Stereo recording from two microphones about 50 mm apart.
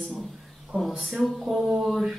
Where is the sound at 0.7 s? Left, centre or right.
Right.